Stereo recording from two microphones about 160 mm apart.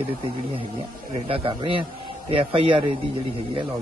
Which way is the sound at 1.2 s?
35° right (ahead or behind).